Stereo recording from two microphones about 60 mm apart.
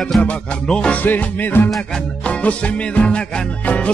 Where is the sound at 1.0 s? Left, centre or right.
Left.